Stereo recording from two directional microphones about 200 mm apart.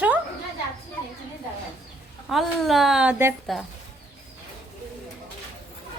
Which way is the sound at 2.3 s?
Centre (ahead or behind).